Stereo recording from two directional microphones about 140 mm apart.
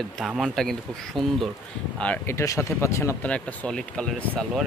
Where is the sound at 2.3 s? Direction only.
20° left (ahead or behind).